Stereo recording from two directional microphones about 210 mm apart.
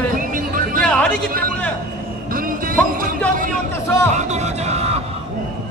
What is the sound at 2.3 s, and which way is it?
Music, 40° right (ahead or behind).